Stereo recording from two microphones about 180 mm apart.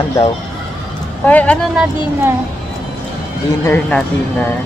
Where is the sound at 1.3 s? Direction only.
10° left (ahead or behind).